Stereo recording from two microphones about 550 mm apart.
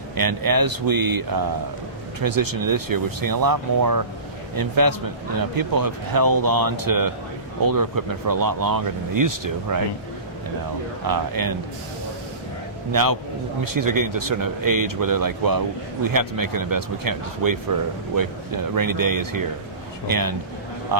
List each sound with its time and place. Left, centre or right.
0.2 s speech: right
11.0 s speech: right
12.9 s speech: right